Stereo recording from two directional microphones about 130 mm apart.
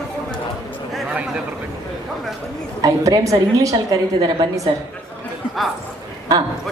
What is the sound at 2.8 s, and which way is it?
A woman's voice, 25° right (ahead or behind).